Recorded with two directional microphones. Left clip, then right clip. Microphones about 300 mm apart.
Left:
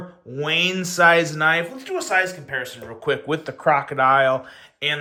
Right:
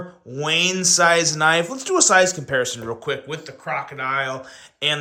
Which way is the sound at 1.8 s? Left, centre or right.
Centre.